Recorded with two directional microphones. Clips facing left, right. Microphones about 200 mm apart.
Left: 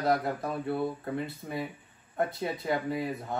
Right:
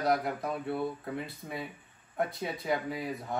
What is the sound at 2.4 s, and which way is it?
Speech, centre (ahead or behind).